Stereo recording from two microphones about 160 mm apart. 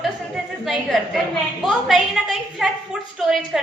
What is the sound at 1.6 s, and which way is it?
A woman's voice, centre (ahead or behind).